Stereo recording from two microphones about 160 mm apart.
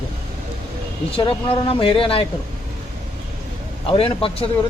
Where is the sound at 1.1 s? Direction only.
35° left (ahead or behind).